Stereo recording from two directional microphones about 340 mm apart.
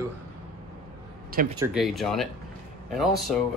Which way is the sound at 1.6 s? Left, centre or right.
Centre.